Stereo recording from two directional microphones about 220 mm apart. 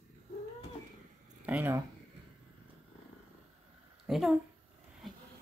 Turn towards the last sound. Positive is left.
turn(degrees=0)  # may be behind; listen again after turning